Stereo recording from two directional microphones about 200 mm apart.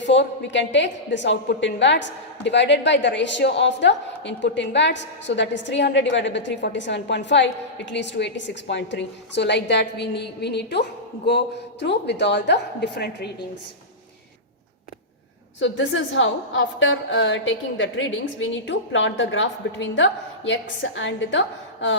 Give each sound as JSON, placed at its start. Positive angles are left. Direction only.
{"t": 0.0, "sound": "a woman's voice", "side_deg": 65}
{"t": 15.6, "sound": "a woman's voice", "side_deg": 70}